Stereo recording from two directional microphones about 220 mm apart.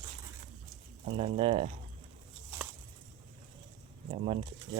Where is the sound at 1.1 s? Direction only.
30° right (ahead or behind).